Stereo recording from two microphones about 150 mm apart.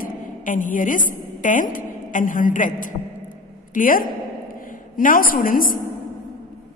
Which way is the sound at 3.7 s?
70° left (ahead or behind).